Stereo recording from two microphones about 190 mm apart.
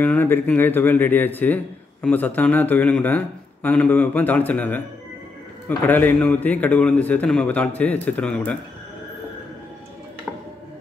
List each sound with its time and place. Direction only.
0.0 s speech: 10° left (ahead or behind)
5.9 s speech: 10° left (ahead or behind)